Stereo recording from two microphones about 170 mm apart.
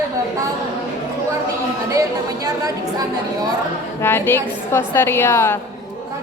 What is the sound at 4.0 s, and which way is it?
A woman's voice, 15° left (ahead or behind).